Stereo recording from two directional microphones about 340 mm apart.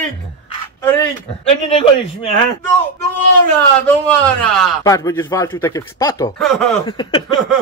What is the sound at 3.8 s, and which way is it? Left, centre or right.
A man's voice, centre.